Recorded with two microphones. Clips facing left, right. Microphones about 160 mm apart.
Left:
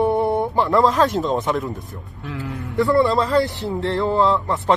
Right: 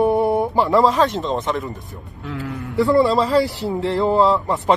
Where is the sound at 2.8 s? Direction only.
20° right (ahead or behind).